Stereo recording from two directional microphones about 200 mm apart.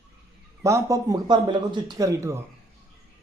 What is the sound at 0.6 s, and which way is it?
Speech, 15° right (ahead or behind).